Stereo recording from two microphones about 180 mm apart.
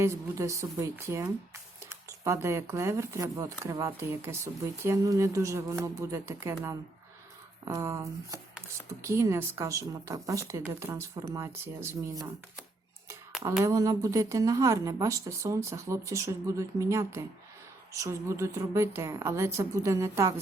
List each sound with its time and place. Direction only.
0.0 s speech: 15° right (ahead or behind)
13.7 s speech: 20° right (ahead or behind)